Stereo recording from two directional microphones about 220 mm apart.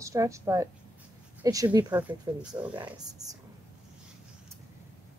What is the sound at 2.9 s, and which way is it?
Speech, 15° right (ahead or behind).